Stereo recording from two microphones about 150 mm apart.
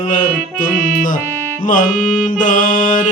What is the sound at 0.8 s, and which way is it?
Music, 60° left (ahead or behind).